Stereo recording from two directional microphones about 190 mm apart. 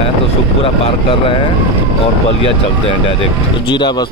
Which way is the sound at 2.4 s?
30° left (ahead or behind).